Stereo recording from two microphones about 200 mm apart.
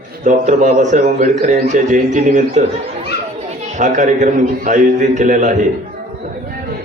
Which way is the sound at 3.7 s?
40° right (ahead or behind).